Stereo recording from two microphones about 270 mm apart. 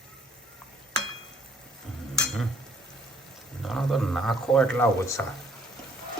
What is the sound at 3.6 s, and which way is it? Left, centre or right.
Speech, centre.